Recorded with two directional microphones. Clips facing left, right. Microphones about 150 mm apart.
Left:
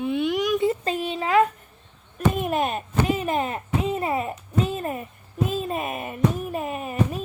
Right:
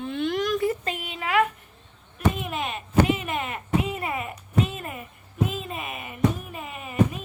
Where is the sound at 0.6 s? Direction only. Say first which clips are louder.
Left 4 dB; 30° left (ahead or behind).